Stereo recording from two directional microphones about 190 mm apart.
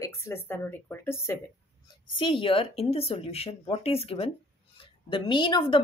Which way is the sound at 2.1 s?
25° left (ahead or behind).